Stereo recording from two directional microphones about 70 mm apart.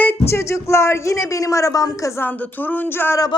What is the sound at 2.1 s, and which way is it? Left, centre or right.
A woman's voice, left.